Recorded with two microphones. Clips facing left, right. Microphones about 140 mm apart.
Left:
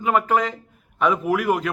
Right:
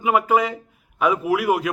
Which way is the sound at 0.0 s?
10° right (ahead or behind).